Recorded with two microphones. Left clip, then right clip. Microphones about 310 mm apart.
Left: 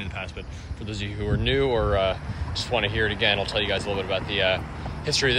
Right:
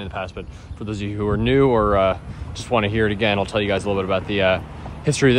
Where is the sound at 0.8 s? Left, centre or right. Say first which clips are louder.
Right 6 dB; centre.